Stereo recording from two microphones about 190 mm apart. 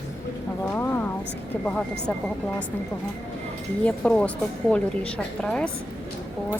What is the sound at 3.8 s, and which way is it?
A woman's voice, 5° left (ahead or behind).